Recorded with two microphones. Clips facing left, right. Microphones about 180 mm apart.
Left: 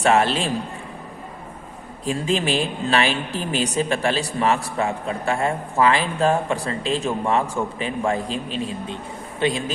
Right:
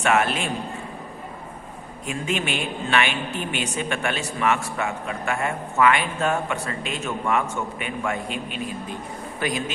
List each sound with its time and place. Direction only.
0.0 s a woman's voice: 30° left (ahead or behind)
2.0 s a woman's voice: 35° left (ahead or behind)